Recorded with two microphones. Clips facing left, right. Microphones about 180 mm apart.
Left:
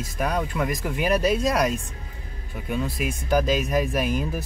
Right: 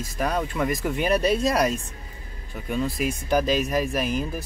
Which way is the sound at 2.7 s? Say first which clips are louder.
Right 2 dB; centre (ahead or behind).